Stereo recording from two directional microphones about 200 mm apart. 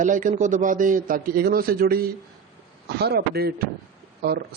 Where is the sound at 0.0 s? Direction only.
40° right (ahead or behind).